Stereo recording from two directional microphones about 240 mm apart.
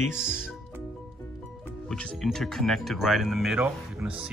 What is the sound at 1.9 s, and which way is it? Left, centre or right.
Speech, centre.